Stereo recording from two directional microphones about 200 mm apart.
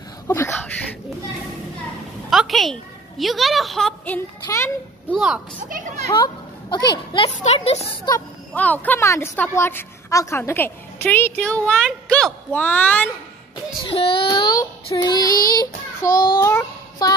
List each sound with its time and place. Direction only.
0.3 s a sound: 10° left (ahead or behind)
2.2 s a woman's voice: centre (ahead or behind)
5.1 s speech: centre (ahead or behind)
6.1 s a woman's voice: 20° left (ahead or behind)
8.5 s a woman's voice: 10° left (ahead or behind)
13.8 s child singing: 25° left (ahead or behind)
16.3 s a sound: 15° left (ahead or behind)